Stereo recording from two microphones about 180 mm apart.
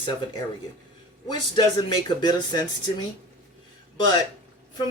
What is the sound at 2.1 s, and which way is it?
Speech, 25° left (ahead or behind).